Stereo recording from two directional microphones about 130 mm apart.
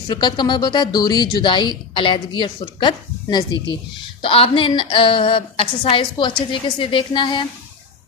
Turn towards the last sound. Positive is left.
turn(degrees=40)  # may be behind; listen again after turning